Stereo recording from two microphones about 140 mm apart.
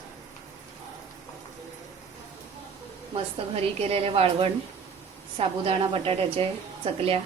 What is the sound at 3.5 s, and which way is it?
A woman's voice, 45° right (ahead or behind).